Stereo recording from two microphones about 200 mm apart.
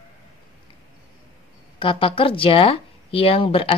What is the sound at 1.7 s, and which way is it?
Speech, 25° left (ahead or behind).